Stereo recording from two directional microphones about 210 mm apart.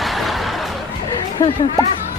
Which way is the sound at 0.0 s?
Centre (ahead or behind).